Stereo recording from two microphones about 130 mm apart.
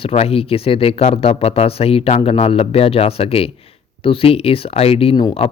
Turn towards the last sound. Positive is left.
turn(degrees=45)  # may be behind; listen again after turning